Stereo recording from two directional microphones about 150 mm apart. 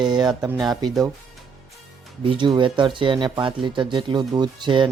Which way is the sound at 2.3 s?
30° right (ahead or behind).